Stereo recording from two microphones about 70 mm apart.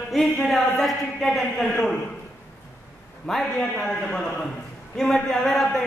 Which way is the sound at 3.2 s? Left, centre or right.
Centre.